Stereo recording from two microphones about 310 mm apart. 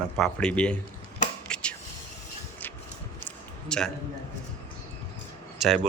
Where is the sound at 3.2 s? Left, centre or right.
Centre.